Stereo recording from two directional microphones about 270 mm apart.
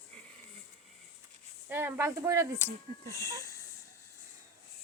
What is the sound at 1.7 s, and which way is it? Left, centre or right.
Speech, centre.